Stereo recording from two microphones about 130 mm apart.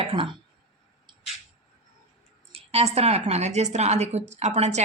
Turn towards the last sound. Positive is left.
turn(degrees=-60)  # may be behind; listen again after turning